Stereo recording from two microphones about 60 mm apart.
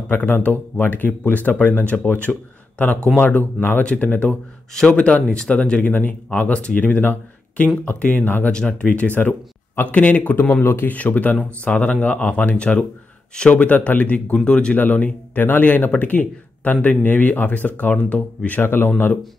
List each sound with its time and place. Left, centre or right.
0.1 s speech: left
8.5 s speech: centre
8.8 s speech: left
10.5 s speech: left
18.6 s speech: left